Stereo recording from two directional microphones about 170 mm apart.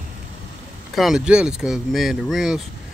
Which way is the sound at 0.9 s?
Centre (ahead or behind).